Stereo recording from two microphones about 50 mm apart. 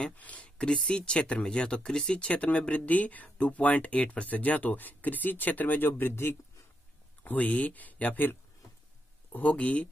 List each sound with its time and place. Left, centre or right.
0.0 s speech: left
7.2 s speech: left